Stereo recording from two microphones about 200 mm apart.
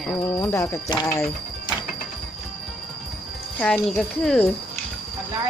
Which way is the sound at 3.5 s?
5° left (ahead or behind).